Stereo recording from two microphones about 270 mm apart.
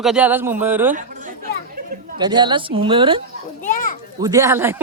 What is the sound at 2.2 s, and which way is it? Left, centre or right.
A woman's voice, centre.